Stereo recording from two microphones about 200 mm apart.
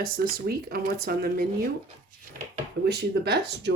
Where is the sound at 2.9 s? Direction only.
55° right (ahead or behind).